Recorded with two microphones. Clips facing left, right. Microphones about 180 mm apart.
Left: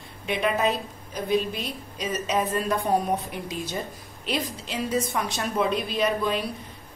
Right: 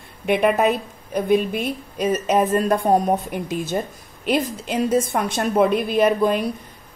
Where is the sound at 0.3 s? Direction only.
60° right (ahead or behind).